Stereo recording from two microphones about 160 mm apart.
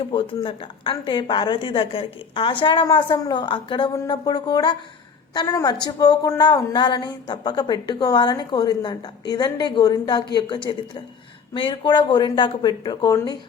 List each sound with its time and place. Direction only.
0.0 s a woman's voice: 35° left (ahead or behind)